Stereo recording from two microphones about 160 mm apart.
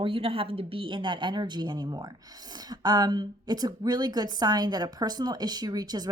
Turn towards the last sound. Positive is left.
turn(degrees=-25)  # may be behind; listen again after turning